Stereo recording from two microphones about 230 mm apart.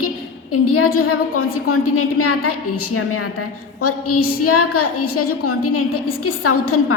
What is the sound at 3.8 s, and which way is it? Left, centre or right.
A woman's voice, left.